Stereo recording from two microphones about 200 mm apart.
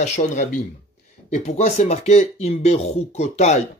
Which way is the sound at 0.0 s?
35° left (ahead or behind).